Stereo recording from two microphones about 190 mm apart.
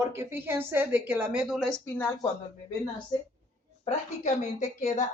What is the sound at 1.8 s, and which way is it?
Speech, 10° left (ahead or behind).